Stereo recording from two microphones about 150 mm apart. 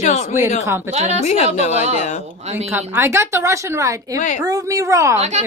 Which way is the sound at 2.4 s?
45° right (ahead or behind).